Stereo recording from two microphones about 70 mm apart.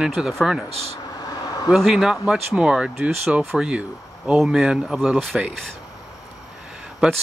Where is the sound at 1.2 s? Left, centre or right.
Left.